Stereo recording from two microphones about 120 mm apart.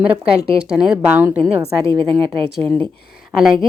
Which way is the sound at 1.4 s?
50° right (ahead or behind).